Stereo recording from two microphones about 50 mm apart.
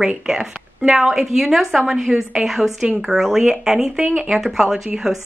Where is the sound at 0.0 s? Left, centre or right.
Centre.